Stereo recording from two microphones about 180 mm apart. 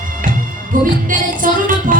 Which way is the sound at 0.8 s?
50° right (ahead or behind).